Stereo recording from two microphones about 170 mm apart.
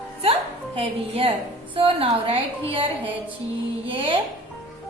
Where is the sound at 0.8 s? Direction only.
35° right (ahead or behind).